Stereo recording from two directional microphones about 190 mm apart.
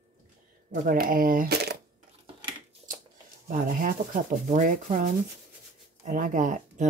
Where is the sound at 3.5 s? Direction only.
45° right (ahead or behind).